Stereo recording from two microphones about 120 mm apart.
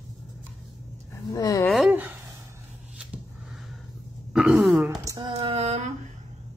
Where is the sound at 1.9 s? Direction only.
15° right (ahead or behind).